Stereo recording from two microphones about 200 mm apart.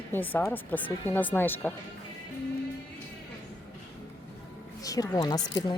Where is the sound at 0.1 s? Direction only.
10° left (ahead or behind).